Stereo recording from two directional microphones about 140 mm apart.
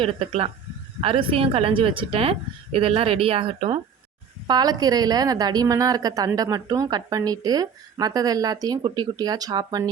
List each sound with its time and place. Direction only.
0.0 s a woman's voice: 40° right (ahead or behind)
4.4 s a woman's voice: 30° right (ahead or behind)